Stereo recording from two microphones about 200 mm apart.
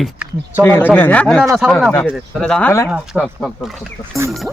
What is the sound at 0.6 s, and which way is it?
Speech, 10° left (ahead or behind).